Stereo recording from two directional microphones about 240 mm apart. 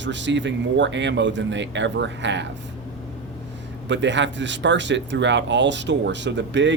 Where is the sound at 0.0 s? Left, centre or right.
Right.